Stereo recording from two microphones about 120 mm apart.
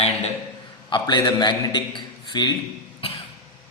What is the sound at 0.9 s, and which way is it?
A man's voice, 40° left (ahead or behind).